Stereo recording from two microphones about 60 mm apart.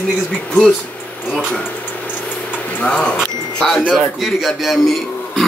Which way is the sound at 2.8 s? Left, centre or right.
Centre.